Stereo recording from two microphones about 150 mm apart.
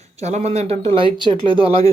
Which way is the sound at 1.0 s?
35° right (ahead or behind).